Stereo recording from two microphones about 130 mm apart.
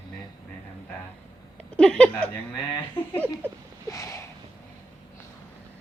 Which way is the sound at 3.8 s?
25° left (ahead or behind).